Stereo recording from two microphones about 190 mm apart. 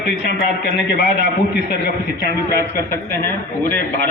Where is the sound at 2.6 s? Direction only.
15° left (ahead or behind).